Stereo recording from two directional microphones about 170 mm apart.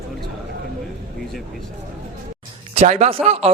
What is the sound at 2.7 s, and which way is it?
Speech, 40° right (ahead or behind).